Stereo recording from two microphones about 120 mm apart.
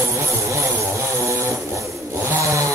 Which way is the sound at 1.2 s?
25° right (ahead or behind).